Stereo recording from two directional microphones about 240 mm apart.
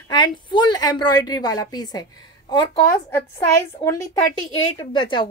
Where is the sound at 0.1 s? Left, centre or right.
Centre.